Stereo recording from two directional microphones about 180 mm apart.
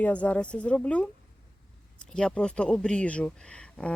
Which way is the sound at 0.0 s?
10° left (ahead or behind).